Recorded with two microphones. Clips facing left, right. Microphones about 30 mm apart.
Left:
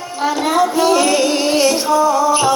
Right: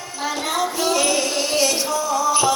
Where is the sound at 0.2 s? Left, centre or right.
Left.